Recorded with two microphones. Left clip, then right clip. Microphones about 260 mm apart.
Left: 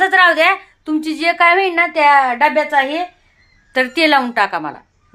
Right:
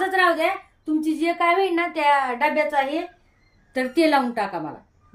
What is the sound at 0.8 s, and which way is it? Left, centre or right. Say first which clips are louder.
Speech: left 5 dB; left.